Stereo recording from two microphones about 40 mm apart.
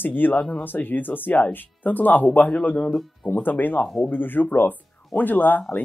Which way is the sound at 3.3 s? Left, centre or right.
Left.